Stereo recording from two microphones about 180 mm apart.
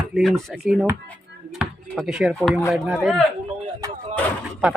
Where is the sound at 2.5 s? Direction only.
Centre (ahead or behind).